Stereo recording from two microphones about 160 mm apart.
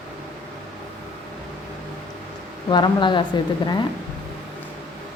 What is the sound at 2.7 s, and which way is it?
Speech, 30° left (ahead or behind).